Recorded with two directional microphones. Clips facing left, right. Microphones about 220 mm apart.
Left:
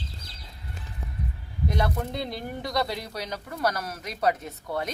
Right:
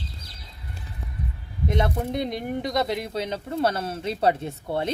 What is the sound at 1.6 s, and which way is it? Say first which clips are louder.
Speech: right 3 dB; 20° right (ahead or behind).